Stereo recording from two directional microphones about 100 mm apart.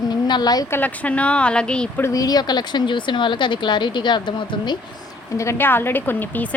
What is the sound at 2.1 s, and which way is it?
Speech, 40° left (ahead or behind).